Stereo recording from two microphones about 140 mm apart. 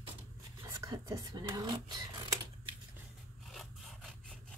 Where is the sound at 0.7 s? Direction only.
25° right (ahead or behind).